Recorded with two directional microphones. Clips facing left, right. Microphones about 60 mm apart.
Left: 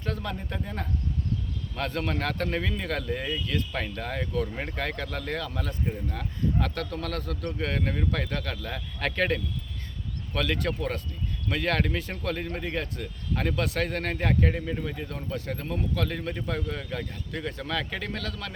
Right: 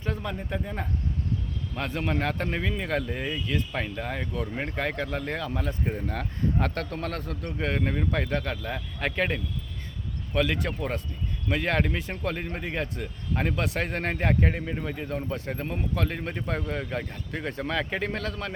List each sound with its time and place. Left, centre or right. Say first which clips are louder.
0.0 s speech: right 1 dB; centre
5.9 s speech: right 3 dB; right